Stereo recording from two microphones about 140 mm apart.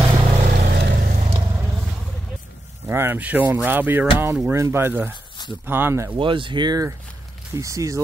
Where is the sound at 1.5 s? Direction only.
15° right (ahead or behind).